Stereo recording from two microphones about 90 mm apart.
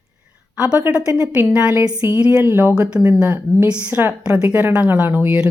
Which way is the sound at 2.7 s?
10° right (ahead or behind).